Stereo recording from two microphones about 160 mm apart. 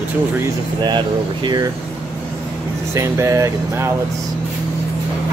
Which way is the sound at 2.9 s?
20° right (ahead or behind).